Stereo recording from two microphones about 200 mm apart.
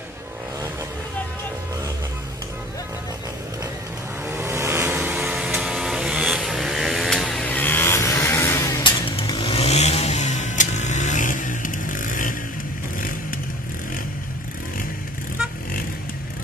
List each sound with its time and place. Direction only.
4.3 s vehicle: 10° right (ahead or behind); by 12.4 s 40° left (ahead or behind)